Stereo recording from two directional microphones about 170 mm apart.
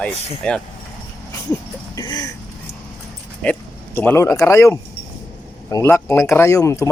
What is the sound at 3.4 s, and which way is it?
Speech, 5° left (ahead or behind).